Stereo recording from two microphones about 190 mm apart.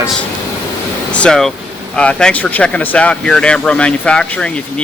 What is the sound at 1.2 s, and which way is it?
Speech, 5° left (ahead or behind).